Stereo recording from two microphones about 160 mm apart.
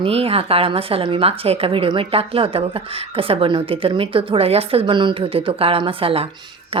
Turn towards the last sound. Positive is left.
turn(degrees=-35)  # may be behind; listen again after turning